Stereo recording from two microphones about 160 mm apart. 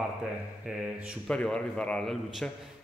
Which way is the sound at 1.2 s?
5° left (ahead or behind).